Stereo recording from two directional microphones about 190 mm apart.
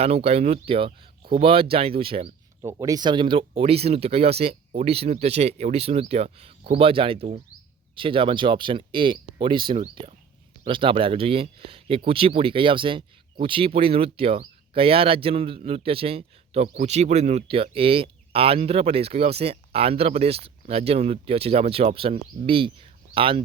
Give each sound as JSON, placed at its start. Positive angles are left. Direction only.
{"t": 0.0, "sound": "speech", "side_deg": -30}
{"t": 2.6, "sound": "speech", "side_deg": -15}